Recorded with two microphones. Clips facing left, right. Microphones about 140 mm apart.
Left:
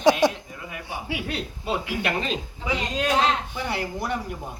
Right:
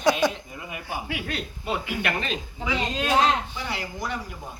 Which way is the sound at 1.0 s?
20° left (ahead or behind).